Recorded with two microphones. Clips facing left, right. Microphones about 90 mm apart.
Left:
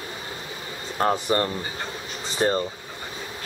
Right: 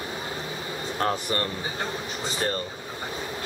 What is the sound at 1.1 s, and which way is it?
Speech, 20° left (ahead or behind).